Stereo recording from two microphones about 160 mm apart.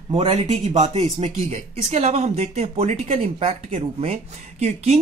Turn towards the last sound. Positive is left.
turn(degrees=-45)  # may be behind; listen again after turning